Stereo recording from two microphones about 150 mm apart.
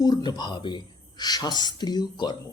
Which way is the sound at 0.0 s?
30° left (ahead or behind).